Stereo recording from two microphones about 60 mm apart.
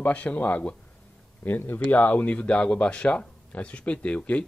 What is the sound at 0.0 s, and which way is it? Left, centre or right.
Speech, left.